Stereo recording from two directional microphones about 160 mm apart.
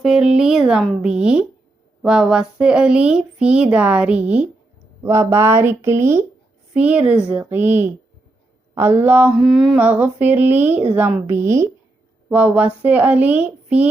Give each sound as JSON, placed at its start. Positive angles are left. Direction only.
{"t": 0.0, "sound": "speech", "side_deg": -5}
{"t": 8.7, "sound": "speech", "side_deg": -15}